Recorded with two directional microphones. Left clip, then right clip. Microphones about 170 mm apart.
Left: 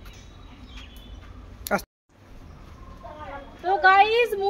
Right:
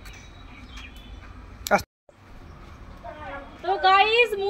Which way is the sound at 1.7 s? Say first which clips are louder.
Right 4 dB; centre (ahead or behind).